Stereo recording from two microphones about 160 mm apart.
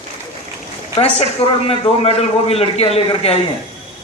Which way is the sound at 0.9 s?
35° left (ahead or behind).